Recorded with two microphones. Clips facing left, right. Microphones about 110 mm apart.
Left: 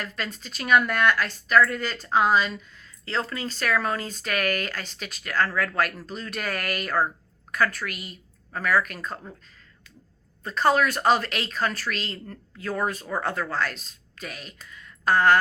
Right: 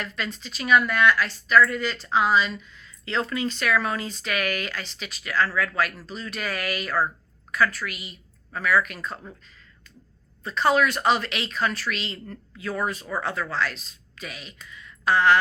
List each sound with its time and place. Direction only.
0.0 s a woman's voice: 45° left (ahead or behind)
10.4 s a woman's voice: 45° left (ahead or behind)